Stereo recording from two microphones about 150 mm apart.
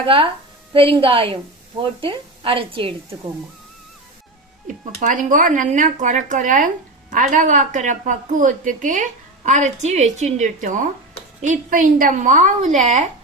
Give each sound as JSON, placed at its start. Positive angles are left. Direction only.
{"t": 0.7, "sound": "a woman's voice", "side_deg": -35}
{"t": 4.9, "sound": "a woman's voice", "side_deg": -60}